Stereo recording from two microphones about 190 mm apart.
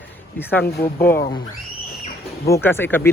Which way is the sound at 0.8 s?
15° left (ahead or behind).